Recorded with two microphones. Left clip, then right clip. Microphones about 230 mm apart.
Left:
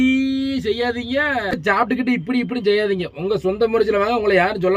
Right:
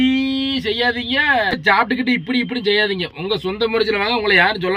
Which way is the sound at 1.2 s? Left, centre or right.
Centre.